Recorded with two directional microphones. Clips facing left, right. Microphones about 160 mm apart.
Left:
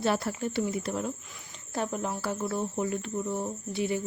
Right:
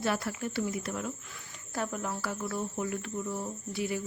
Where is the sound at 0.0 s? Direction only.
30° left (ahead or behind).